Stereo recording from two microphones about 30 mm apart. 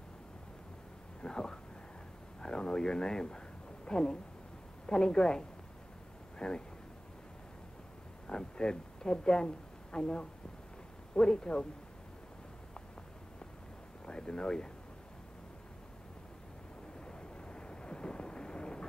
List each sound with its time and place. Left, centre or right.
1.2 s a sound: left
4.8 s a woman's voice: left
8.3 s a woman's voice: left
14.0 s speech: left
17.0 s vehicle: left